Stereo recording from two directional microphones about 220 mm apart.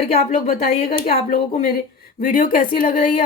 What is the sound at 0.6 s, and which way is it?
A woman's voice, 40° left (ahead or behind).